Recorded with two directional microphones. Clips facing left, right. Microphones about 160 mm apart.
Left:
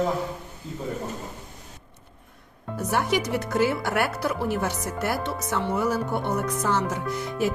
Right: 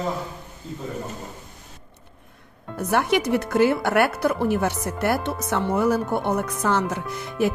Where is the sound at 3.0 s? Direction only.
65° right (ahead or behind).